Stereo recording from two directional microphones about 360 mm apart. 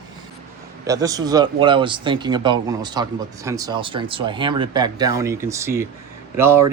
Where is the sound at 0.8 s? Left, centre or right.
Centre.